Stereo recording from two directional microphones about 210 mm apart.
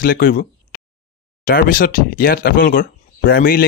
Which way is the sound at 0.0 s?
45° left (ahead or behind).